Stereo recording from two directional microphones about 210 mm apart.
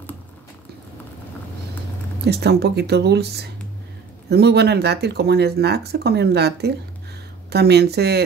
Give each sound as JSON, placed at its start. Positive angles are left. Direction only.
{"t": 2.2, "sound": "speech", "side_deg": -50}